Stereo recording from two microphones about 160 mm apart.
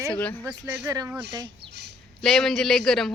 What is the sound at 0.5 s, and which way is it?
Speech, 20° right (ahead or behind).